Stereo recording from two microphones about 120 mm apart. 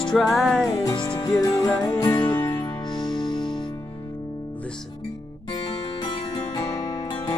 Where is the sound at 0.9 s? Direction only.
35° left (ahead or behind).